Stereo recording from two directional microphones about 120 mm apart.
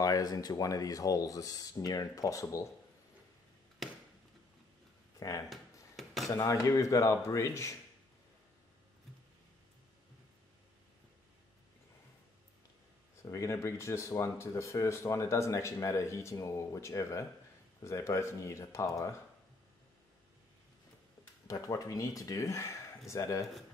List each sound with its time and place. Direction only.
0.0 s speech: 30° left (ahead or behind)
3.8 s chop: centre (ahead or behind)
5.5 s a sound: centre (ahead or behind)
6.2 s speech: 25° left (ahead or behind)
13.3 s speech: 25° left (ahead or behind)
21.5 s speech: 30° left (ahead or behind)